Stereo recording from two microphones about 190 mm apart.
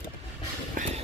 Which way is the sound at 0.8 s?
35° right (ahead or behind).